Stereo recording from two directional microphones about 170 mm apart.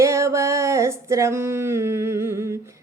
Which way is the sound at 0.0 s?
15° right (ahead or behind).